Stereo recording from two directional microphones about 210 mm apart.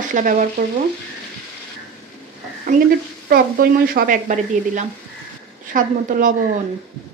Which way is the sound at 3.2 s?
45° right (ahead or behind).